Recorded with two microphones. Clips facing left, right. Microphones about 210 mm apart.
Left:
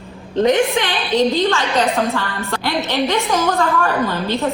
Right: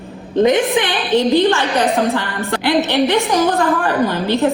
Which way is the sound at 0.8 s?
15° right (ahead or behind).